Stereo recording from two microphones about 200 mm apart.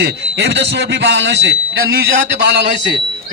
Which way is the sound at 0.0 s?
60° right (ahead or behind).